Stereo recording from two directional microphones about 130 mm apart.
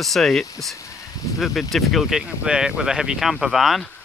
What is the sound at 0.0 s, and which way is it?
Speech, centre (ahead or behind).